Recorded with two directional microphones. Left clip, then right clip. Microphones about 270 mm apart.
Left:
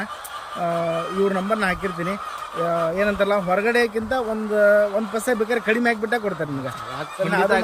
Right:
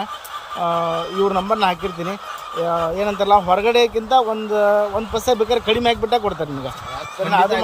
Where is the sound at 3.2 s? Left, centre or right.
Centre.